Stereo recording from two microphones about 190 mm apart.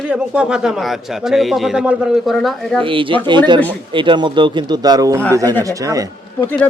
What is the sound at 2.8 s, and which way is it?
A man's voice, 25° right (ahead or behind).